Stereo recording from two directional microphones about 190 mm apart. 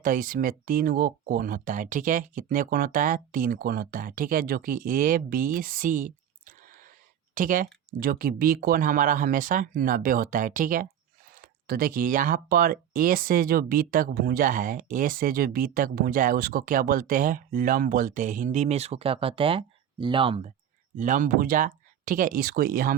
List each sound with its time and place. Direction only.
0.0 s speech: 45° right (ahead or behind); by 20.5 s 30° right (ahead or behind)
20.9 s speech: 40° right (ahead or behind)